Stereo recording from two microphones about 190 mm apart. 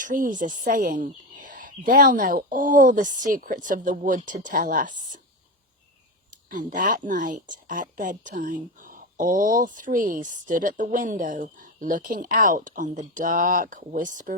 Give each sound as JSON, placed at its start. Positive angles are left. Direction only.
{"t": 0.0, "sound": "a woman's voice", "side_deg": -45}
{"t": 6.5, "sound": "a woman's voice", "side_deg": -45}